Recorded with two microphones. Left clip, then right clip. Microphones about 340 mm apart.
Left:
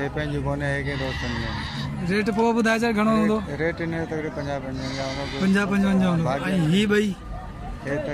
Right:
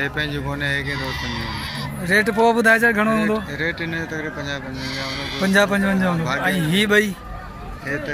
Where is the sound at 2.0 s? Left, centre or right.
Centre; by 5.0 s left.